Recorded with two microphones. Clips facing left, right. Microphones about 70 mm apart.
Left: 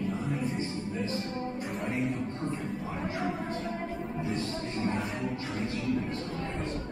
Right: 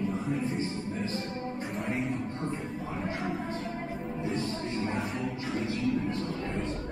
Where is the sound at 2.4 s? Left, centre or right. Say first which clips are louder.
Even; centre.